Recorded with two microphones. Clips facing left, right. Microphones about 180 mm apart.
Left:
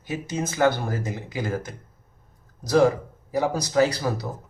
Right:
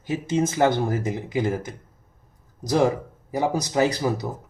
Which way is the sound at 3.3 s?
20° right (ahead or behind).